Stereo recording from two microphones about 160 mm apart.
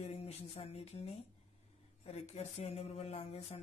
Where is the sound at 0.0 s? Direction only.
40° left (ahead or behind).